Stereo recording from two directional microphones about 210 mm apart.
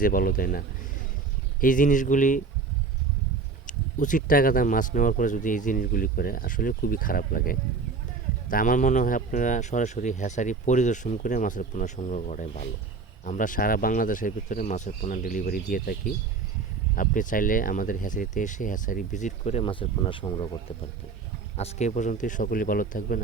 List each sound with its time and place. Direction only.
0.0 s speech: 40° left (ahead or behind)
1.6 s speech: 40° left (ahead or behind)
3.7 s speech: 40° left (ahead or behind); by 20.5 s 20° left (ahead or behind)
21.5 s speech: 30° left (ahead or behind)